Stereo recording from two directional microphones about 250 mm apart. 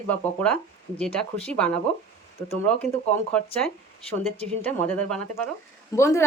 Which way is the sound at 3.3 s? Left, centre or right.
Centre.